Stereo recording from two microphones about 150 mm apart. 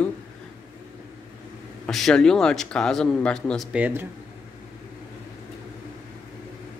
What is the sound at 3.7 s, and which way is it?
Speech, 10° right (ahead or behind).